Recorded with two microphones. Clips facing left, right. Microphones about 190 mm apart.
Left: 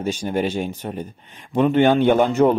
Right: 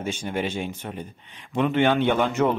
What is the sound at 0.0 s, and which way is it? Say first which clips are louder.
Speech: left 5 dB; 40° left (ahead or behind).